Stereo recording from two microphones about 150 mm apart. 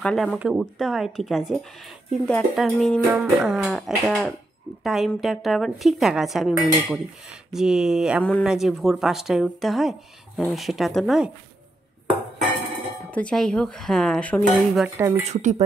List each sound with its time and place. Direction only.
0.0 s speech: 5° left (ahead or behind)
8.2 s speech: 10° left (ahead or behind)
13.0 s speech: 10° left (ahead or behind)
15.0 s speech: 15° right (ahead or behind)
15.2 s speech: 50° right (ahead or behind)